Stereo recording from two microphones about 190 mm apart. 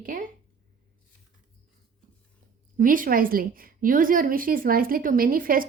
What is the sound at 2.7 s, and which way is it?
Speech, 45° right (ahead or behind).